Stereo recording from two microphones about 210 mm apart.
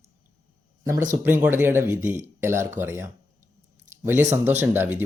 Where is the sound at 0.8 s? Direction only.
15° right (ahead or behind).